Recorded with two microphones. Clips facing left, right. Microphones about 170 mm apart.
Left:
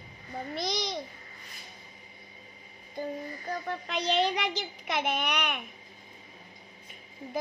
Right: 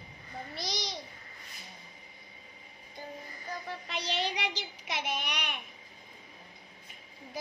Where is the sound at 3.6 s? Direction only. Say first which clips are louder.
Left 7 dB; 55° left (ahead or behind).